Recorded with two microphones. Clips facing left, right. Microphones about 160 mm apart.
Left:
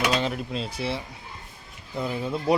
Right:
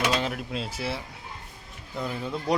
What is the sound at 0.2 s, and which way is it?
Speech, centre (ahead or behind).